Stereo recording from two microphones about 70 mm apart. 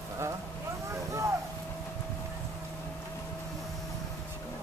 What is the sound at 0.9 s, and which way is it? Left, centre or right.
Vehicle, right.